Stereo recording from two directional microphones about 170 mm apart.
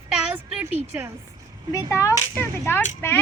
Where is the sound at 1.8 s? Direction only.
15° left (ahead or behind).